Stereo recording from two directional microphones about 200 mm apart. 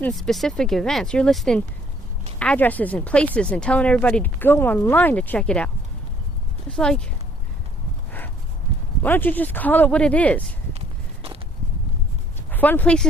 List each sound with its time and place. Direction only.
0.0 s speech: centre (ahead or behind)
9.0 s speech: 10° left (ahead or behind)
10.8 s walk: 30° right (ahead or behind)
12.5 s speech: 10° left (ahead or behind)